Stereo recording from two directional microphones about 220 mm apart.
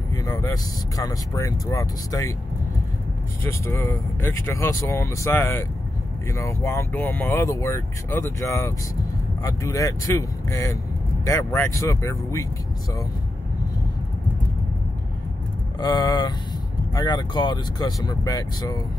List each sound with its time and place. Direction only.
0.1 s speech: 15° left (ahead or behind)
3.4 s speech: 10° left (ahead or behind)
15.8 s speech: 15° left (ahead or behind)